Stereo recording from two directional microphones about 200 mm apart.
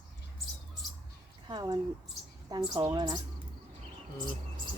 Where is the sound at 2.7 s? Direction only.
20° right (ahead or behind).